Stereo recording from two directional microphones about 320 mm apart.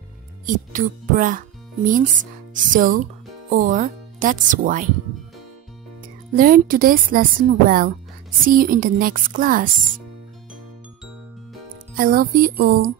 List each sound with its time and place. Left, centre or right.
0.5 s speech: right
6.3 s speech: right
12.0 s speech: right